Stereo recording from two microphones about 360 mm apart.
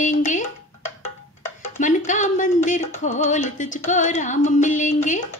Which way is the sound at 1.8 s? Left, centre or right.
Left.